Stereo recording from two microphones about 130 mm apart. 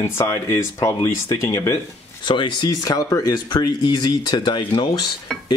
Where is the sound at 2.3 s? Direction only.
35° left (ahead or behind).